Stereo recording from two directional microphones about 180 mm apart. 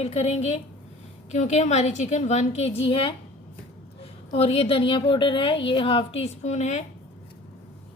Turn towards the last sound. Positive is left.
turn(degrees=40)  # may be behind; listen again after turning